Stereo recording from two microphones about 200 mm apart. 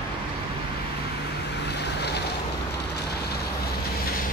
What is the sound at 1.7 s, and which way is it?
Boat, 55° left (ahead or behind).